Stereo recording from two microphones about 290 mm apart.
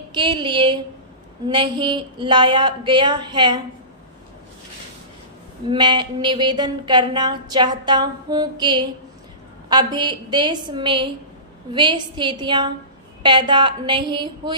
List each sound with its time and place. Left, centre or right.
0.1 s a woman's voice: centre
5.6 s a woman's voice: centre